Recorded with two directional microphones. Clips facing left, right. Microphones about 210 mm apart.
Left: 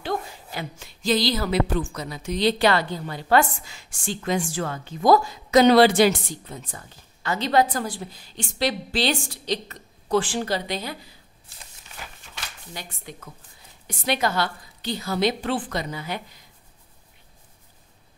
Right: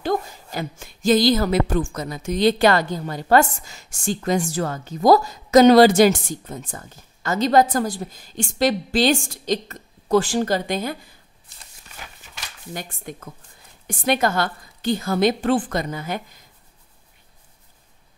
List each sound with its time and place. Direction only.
0.0 s speech: 40° right (ahead or behind)
12.7 s speech: 50° right (ahead or behind)